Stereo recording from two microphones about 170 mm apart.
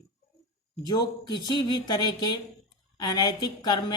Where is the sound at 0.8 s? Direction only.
25° left (ahead or behind).